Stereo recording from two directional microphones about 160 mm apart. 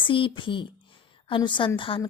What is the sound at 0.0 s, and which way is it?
A woman's voice, 30° left (ahead or behind).